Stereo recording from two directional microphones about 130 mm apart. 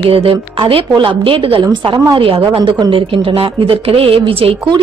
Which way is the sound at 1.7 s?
30° right (ahead or behind).